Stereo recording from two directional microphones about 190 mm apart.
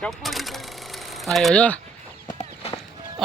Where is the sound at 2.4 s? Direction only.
30° left (ahead or behind).